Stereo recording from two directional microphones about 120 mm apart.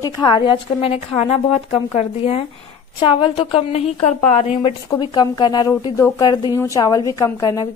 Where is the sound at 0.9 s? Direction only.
60° left (ahead or behind).